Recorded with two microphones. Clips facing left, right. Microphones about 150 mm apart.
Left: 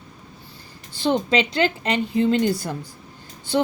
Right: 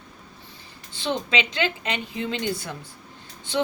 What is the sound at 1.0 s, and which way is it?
A woman's voice, 35° left (ahead or behind).